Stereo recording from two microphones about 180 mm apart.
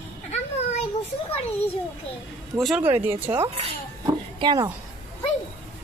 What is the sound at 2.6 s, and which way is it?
Speech, centre (ahead or behind).